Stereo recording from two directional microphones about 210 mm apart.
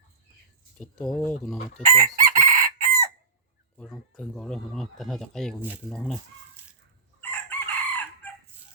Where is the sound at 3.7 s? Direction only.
5° left (ahead or behind).